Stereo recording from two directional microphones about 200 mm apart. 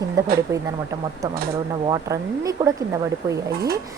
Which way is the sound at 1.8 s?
20° right (ahead or behind).